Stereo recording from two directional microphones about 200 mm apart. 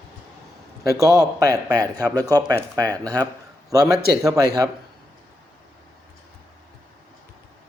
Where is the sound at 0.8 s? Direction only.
15° right (ahead or behind).